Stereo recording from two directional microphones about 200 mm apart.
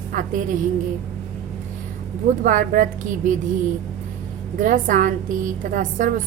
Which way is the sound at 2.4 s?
40° right (ahead or behind).